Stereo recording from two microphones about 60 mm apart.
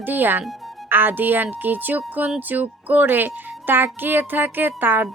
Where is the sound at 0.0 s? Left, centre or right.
Right.